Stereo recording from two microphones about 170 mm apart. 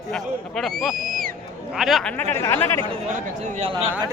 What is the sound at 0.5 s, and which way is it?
Speech, centre (ahead or behind).